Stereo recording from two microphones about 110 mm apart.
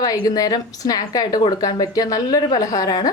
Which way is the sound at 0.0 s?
35° left (ahead or behind).